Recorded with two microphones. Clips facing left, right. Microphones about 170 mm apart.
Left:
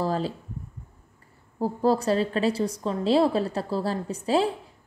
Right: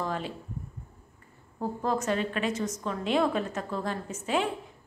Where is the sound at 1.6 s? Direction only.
35° left (ahead or behind).